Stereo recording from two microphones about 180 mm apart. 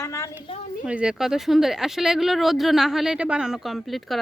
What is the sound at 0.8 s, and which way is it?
Speech, 5° right (ahead or behind).